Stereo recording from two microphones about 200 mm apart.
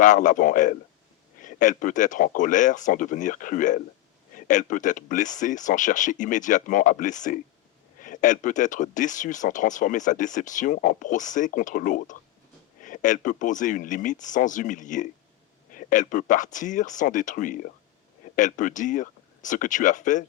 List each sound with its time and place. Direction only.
0.0 s speech: 40° left (ahead or behind)